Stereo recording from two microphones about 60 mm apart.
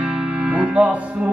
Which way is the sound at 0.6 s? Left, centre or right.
Right.